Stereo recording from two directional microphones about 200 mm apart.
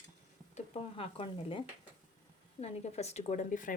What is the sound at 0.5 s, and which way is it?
Speech, 30° left (ahead or behind).